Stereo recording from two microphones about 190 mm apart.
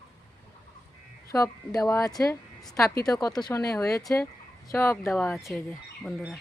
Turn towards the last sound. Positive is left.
turn(degrees=0)  # may be behind; listen again after turning